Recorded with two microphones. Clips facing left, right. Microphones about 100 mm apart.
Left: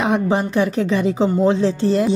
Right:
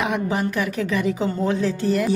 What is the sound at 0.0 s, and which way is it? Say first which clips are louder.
A woman's voice: left 4 dB; 30° left (ahead or behind).